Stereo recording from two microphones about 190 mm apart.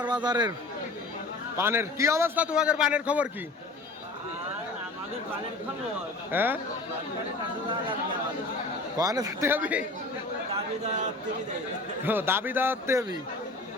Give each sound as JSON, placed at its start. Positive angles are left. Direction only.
{"t": 0.1, "sound": "speech", "side_deg": -25}
{"t": 1.5, "sound": "a man's voice", "side_deg": -15}
{"t": 6.3, "sound": "a man's voice", "side_deg": -10}
{"t": 9.0, "sound": "a man's voice", "side_deg": -20}
{"t": 12.0, "sound": "a man's voice", "side_deg": -10}